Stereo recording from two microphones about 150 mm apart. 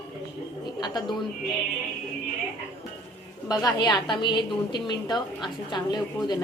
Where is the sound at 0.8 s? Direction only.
30° left (ahead or behind).